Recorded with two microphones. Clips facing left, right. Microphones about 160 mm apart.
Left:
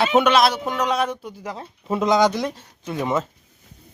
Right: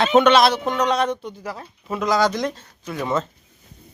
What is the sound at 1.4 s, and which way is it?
Speech, 20° left (ahead or behind).